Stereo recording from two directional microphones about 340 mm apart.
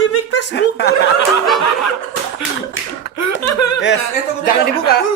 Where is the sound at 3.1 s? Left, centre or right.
Left.